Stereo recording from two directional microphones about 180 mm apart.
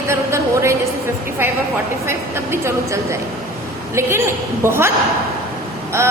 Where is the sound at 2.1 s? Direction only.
15° right (ahead or behind).